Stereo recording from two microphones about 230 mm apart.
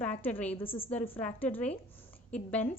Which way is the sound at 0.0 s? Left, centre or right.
Centre.